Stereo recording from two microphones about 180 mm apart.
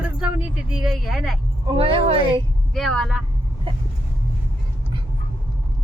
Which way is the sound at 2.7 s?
Centre (ahead or behind).